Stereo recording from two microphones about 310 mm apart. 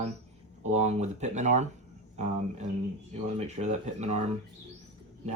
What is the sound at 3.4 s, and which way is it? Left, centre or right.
Speech, right.